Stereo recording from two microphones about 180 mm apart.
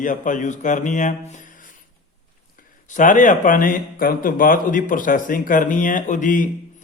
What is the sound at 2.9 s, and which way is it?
Speech, 45° left (ahead or behind).